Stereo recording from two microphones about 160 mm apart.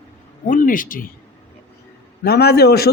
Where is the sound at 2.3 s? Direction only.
85° left.